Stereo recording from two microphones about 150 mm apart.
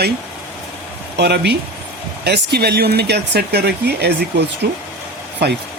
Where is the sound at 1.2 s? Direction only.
90° right.